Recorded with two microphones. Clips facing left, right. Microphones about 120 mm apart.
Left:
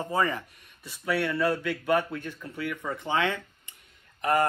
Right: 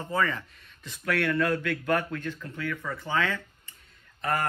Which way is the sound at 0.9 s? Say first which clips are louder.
Even; 5° left (ahead or behind).